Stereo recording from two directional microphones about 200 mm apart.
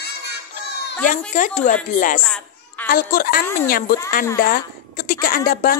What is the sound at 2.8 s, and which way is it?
Speech, 45° left (ahead or behind).